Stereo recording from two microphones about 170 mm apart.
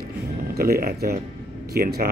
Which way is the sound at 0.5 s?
60° right (ahead or behind).